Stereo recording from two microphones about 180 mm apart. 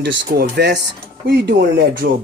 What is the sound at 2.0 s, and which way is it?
Speech, 60° right (ahead or behind).